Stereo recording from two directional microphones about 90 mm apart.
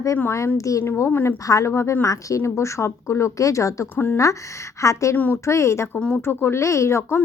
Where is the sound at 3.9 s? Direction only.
20° left (ahead or behind).